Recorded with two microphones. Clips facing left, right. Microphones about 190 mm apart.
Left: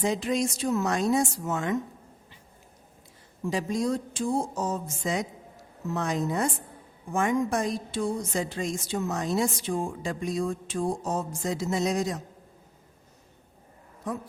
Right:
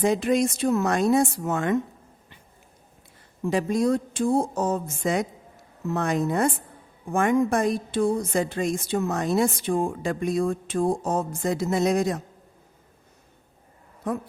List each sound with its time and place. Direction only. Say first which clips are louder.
0.0 s a woman's voice: right 5 dB; 55° right (ahead or behind)
3.4 s a woman's voice: right 5 dB; 60° right (ahead or behind)
14.0 s a woman's voice: right 5 dB; 60° right (ahead or behind)